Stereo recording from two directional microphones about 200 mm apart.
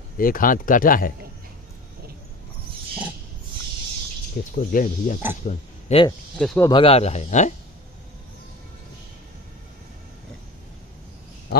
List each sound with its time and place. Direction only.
0.2 s speech: 45° left (ahead or behind)
4.4 s speech: 50° left (ahead or behind)
4.7 s speech: 40° left (ahead or behind)
6.3 s speech: 5° left (ahead or behind)
6.7 s speech: 30° left (ahead or behind)